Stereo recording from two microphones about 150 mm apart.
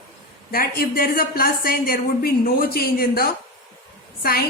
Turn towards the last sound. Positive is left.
turn(degrees=90)